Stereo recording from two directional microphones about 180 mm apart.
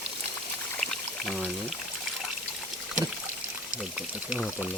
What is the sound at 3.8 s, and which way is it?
Speech, 5° right (ahead or behind).